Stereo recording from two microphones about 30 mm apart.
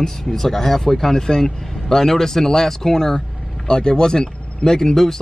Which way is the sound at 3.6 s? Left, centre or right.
Left.